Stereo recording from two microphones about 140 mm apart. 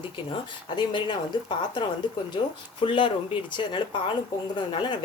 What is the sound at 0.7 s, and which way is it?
Speech, 30° left (ahead or behind).